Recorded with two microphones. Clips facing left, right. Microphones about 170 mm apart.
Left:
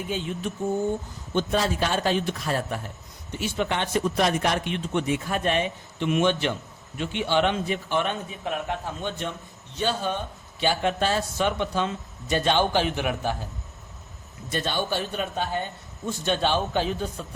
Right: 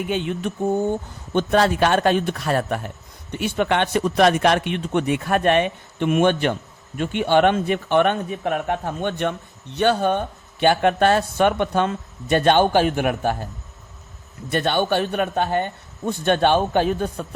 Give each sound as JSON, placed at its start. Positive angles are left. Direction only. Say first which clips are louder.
{"t": 0.1, "sound": "speech", "louder": "right 5 dB", "side_deg": -70}
{"t": 14.5, "sound": "speech", "louder": "right 7 dB", "side_deg": -65}